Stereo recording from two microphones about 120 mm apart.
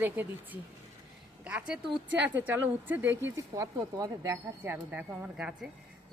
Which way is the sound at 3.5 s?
30° right (ahead or behind).